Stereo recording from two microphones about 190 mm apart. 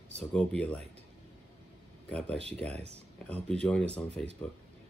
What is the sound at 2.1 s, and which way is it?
Speech, 5° left (ahead or behind).